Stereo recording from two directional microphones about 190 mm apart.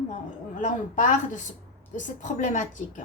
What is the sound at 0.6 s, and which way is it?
A woman's voice, 40° left (ahead or behind).